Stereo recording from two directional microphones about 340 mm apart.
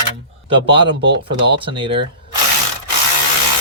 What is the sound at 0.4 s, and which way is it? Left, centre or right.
Speech, centre.